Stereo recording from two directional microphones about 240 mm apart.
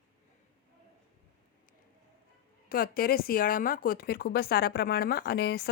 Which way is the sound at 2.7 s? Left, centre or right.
Left.